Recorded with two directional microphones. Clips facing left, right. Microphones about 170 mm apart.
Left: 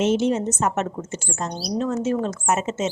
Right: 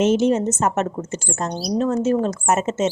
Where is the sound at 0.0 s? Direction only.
45° right (ahead or behind).